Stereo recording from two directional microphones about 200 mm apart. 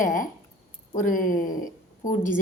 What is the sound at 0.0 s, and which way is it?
A woman's voice, 40° left (ahead or behind).